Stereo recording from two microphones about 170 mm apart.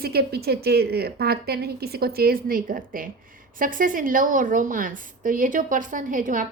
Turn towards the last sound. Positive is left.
turn(degrees=-50)  # may be behind; listen again after turning